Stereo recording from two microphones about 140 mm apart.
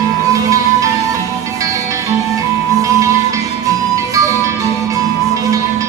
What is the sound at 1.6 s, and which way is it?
Music, 25° right (ahead or behind).